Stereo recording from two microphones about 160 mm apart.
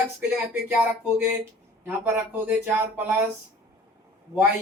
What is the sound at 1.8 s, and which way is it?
Speech, 15° right (ahead or behind).